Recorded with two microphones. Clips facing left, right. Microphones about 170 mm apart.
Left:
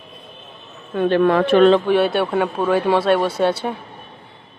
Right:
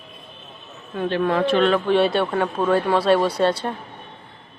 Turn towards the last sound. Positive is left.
turn(degrees=5)  # may be behind; listen again after turning